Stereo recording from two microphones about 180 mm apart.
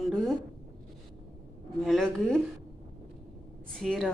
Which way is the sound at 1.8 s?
Centre (ahead or behind).